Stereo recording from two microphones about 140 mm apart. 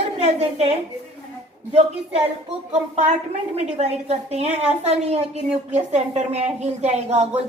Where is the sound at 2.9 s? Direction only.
50° right (ahead or behind).